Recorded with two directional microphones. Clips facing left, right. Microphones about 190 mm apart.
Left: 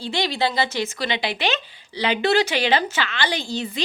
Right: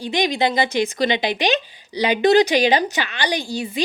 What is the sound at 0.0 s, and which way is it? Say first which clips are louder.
A woman's voice: right 3 dB; 15° right (ahead or behind).